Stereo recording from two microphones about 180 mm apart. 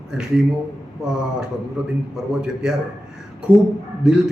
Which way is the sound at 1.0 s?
5° right (ahead or behind).